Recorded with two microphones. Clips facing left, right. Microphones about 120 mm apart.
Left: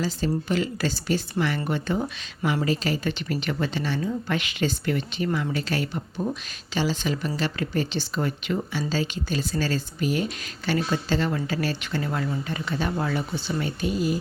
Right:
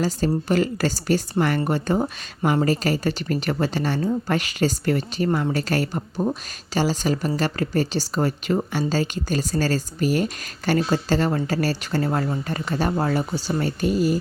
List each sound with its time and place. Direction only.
0.0 s a woman's voice: 45° right (ahead or behind)